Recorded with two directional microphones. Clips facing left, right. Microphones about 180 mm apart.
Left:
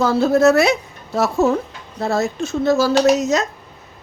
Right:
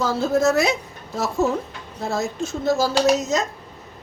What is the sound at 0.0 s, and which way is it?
Speech, 65° left (ahead or behind).